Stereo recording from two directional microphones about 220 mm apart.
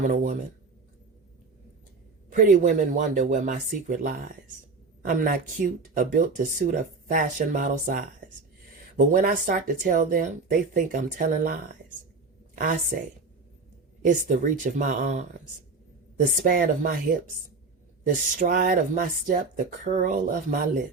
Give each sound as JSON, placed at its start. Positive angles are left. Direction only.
{"t": 0.1, "sound": "speech", "side_deg": -35}
{"t": 2.3, "sound": "speech", "side_deg": -40}
{"t": 16.4, "sound": "speech", "side_deg": -40}
{"t": 18.3, "sound": "speech", "side_deg": -40}